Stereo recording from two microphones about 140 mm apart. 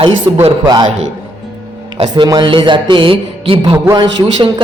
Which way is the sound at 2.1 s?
30° right (ahead or behind).